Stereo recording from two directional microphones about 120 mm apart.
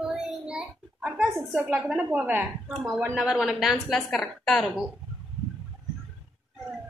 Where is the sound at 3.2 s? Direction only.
5° right (ahead or behind).